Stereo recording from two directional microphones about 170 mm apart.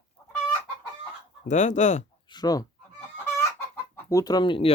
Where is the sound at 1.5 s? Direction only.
45° left (ahead or behind).